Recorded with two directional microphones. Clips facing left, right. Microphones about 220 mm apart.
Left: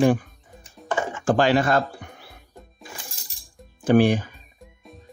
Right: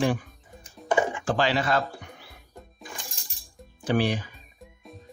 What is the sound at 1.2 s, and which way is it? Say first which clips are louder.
Music: left 6 dB; 50° left (ahead or behind).